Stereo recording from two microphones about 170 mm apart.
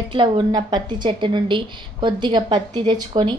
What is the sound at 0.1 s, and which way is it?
A woman's voice, 30° right (ahead or behind).